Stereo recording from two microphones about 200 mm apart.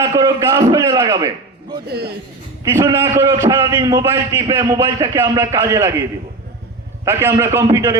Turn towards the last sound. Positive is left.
turn(degrees=-15)  # may be behind; listen again after turning